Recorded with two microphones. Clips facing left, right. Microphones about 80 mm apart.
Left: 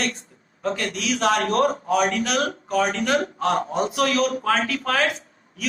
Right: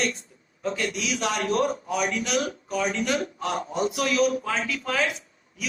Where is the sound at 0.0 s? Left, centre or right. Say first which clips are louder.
Left 1 dB; left.